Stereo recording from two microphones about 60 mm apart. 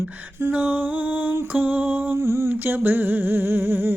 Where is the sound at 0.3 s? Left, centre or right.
Right.